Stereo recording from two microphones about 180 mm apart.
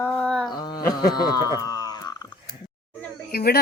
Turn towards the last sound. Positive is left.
turn(degrees=60)  # may be behind; listen again after turning